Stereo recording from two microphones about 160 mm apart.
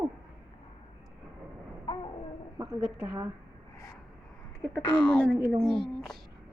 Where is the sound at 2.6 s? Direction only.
20° right (ahead or behind).